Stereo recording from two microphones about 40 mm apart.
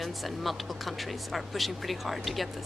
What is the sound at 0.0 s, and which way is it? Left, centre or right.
Speech, centre.